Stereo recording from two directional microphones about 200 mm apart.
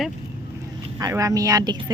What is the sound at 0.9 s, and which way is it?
Speech, 15° right (ahead or behind).